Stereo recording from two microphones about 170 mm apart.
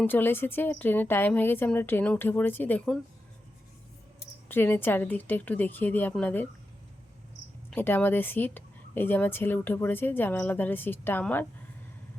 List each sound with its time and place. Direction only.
0.0 s speech: 10° left (ahead or behind)
4.4 s speech: 10° left (ahead or behind)
7.7 s speech: 10° left (ahead or behind)